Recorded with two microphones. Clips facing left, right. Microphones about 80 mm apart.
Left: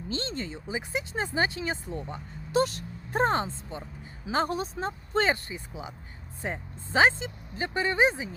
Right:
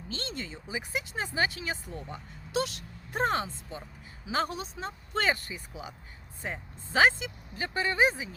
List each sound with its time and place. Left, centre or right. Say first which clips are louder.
0.2 s speech: left 4 dB; left
6.9 s speech: left 1 dB; left